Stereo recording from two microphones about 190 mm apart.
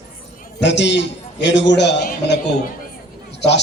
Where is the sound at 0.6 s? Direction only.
65° left (ahead or behind).